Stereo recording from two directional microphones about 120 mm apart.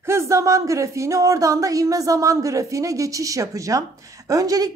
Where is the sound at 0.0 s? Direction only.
20° right (ahead or behind).